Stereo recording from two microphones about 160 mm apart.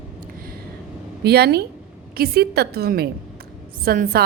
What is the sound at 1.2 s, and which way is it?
Speech, 90° right.